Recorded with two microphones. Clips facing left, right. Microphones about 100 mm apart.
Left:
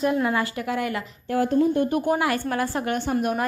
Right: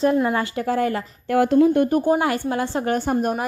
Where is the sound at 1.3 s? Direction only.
75° right (ahead or behind).